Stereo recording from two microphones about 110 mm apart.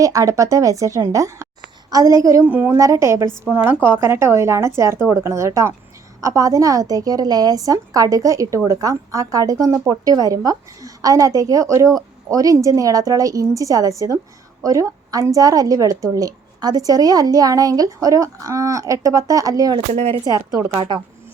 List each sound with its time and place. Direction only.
0.0 s a woman's voice: 30° right (ahead or behind)
2.4 s a woman's voice: 15° right (ahead or behind)
2.7 s a woman's voice: 30° right (ahead or behind)
19.9 s speech: 90° right
20.2 s a woman's voice: 35° right (ahead or behind)
20.7 s speech: 50° right (ahead or behind)